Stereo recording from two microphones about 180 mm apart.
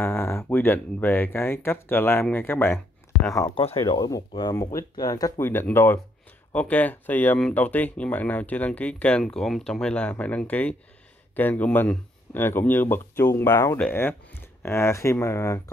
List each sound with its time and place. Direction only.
0.0 s speech: 10° left (ahead or behind)